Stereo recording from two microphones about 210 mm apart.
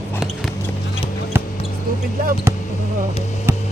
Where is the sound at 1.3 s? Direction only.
10° right (ahead or behind).